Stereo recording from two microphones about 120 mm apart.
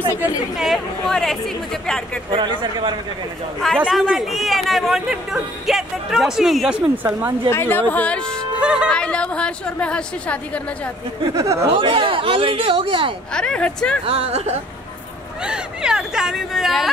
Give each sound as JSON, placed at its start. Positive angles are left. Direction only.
{"t": 0.6, "sound": "speech", "side_deg": 0}
{"t": 2.3, "sound": "speech", "side_deg": -40}
{"t": 3.7, "sound": "speech", "side_deg": -5}
{"t": 7.0, "sound": "a woman's voice", "side_deg": -15}
{"t": 7.5, "sound": "a woman's voice", "side_deg": 15}
{"t": 8.5, "sound": "music", "side_deg": -10}
{"t": 8.9, "sound": "a woman's voice", "side_deg": 10}
{"t": 11.3, "sound": "speech", "side_deg": -25}
{"t": 11.7, "sound": "speech", "side_deg": -50}
{"t": 13.3, "sound": "a woman's voice", "side_deg": 5}
{"t": 14.0, "sound": "speech", "side_deg": -60}
{"t": 15.4, "sound": "speech", "side_deg": -5}